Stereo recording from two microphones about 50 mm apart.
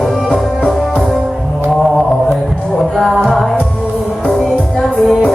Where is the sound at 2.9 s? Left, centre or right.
Centre.